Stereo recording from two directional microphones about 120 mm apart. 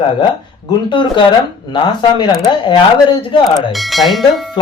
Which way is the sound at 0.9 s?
45° left (ahead or behind).